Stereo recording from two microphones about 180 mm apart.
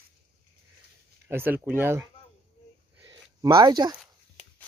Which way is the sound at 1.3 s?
10° right (ahead or behind).